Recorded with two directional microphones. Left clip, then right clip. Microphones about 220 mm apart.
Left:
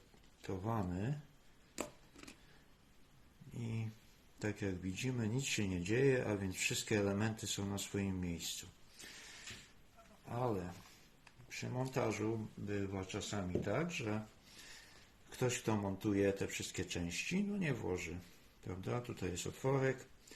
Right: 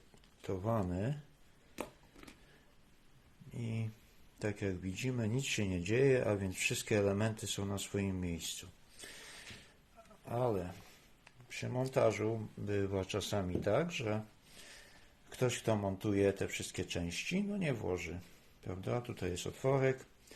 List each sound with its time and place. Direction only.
0.4 s speech: 35° right (ahead or behind)
3.6 s speech: 30° right (ahead or behind)
15.3 s speech: 35° right (ahead or behind)